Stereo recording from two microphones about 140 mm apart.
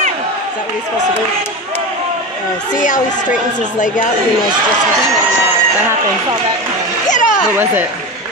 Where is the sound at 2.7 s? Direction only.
70° left (ahead or behind).